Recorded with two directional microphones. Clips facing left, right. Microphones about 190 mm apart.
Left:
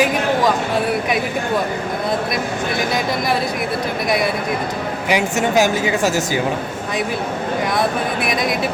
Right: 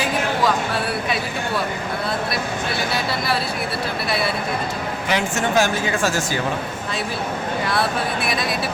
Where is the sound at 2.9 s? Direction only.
15° left (ahead or behind).